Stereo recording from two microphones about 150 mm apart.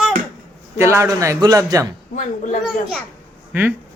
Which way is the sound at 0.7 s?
20° right (ahead or behind).